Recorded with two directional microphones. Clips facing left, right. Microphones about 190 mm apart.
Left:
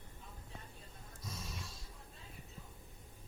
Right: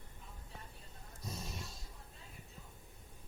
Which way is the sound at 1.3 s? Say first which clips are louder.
Right 2 dB; 25° right (ahead or behind).